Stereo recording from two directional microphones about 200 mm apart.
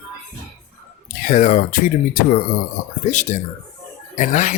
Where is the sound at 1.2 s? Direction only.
40° left (ahead or behind).